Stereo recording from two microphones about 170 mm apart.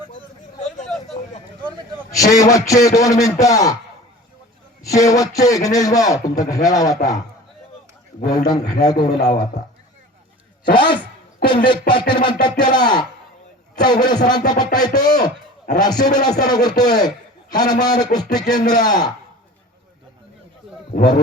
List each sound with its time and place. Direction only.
2.1 s a man's voice: 20° left (ahead or behind)
4.8 s a man's voice: 20° left (ahead or behind)
8.3 s a man's voice: 25° left (ahead or behind)
10.8 s a man's voice: 30° left (ahead or behind)